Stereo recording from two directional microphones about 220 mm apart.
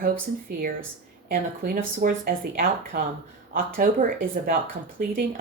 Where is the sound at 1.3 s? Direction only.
40° right (ahead or behind).